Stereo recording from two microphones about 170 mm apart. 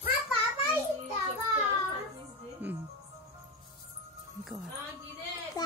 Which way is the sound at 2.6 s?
10° right (ahead or behind).